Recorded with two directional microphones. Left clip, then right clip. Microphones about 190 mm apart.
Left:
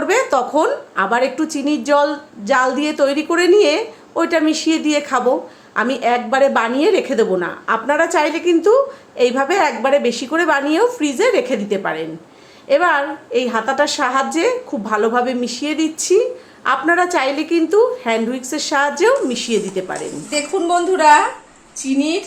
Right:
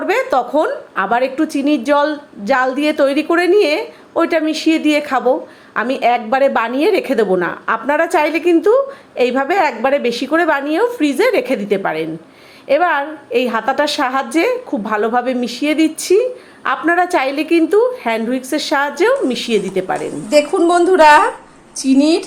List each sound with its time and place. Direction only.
0.0 s a woman's voice: 10° right (ahead or behind)
20.3 s a woman's voice: 35° right (ahead or behind)